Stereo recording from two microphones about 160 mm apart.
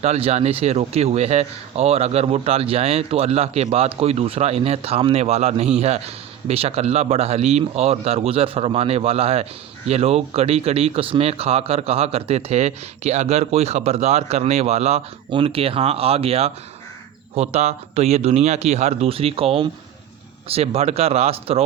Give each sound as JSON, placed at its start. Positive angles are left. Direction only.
{"t": 0.0, "sound": "a man's voice", "side_deg": -40}